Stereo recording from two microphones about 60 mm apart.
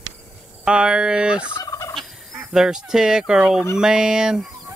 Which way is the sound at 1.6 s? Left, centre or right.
Left.